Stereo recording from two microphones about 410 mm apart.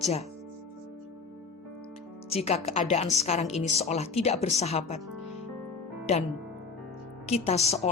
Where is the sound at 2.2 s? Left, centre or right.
Centre.